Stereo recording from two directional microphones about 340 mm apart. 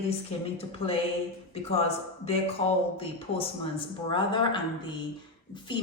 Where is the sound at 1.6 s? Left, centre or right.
Centre.